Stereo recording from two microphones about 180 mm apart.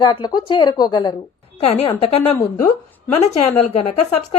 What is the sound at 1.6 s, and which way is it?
Speech, 35° left (ahead or behind).